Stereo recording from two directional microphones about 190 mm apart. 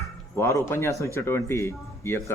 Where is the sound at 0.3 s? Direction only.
15° left (ahead or behind).